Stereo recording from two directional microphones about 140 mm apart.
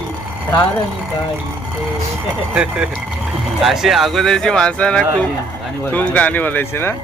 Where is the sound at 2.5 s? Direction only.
5° right (ahead or behind); by 7.0 s 15° left (ahead or behind).